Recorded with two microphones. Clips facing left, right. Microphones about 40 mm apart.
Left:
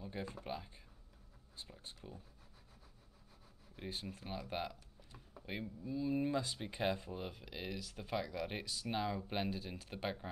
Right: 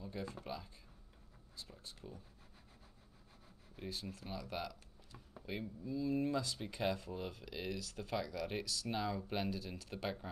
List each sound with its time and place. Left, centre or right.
0.0 s speech: left
2.0 s speech: centre
3.7 s speech: left
5.9 s speech: centre